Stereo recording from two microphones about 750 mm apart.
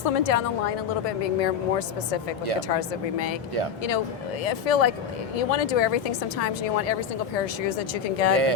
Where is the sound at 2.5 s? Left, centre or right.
Left.